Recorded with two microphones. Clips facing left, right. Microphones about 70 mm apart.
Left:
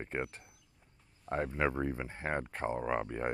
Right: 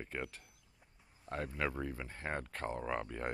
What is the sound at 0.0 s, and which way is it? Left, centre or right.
Speech, left.